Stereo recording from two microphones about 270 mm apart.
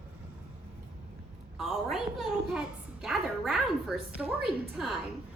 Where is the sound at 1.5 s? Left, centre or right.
Centre.